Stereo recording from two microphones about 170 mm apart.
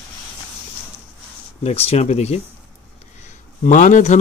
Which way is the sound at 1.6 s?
40° left (ahead or behind).